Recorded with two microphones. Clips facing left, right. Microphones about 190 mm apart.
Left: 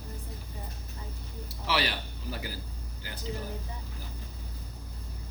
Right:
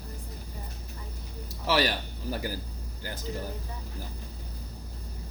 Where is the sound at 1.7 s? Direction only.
45° right (ahead or behind).